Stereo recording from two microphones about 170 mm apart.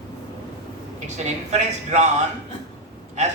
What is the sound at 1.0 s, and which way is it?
Speech, 45° right (ahead or behind).